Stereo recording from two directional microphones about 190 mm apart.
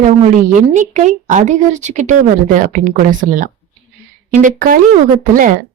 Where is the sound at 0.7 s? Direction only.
40° right (ahead or behind).